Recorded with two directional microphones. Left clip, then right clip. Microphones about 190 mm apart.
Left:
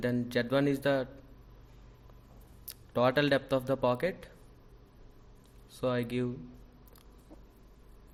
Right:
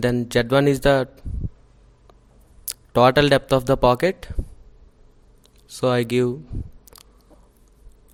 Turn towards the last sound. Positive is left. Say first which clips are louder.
# right 12 dB
turn(degrees=-55)  # may be behind; listen again after turning